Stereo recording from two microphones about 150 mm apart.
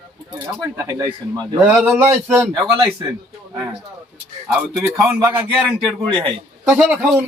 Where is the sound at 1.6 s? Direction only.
15° right (ahead or behind).